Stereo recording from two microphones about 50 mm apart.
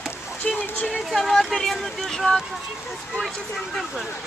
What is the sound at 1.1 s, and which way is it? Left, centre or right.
Speech, centre.